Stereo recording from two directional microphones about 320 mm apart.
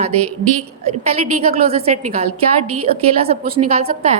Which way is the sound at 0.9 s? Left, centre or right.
Centre.